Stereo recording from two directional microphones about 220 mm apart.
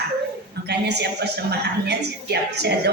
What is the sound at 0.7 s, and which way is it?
A woman's voice, 50° right (ahead or behind).